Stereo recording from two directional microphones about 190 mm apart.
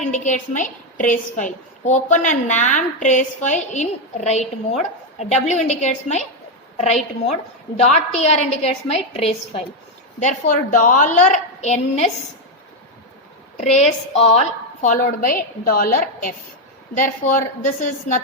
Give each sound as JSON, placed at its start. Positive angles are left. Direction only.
{"t": 0.0, "sound": "a woman's voice", "side_deg": 40}
{"t": 13.7, "sound": "a woman's voice", "side_deg": 35}